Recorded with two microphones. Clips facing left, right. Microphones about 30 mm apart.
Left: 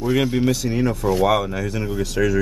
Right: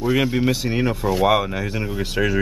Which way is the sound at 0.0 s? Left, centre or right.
Centre.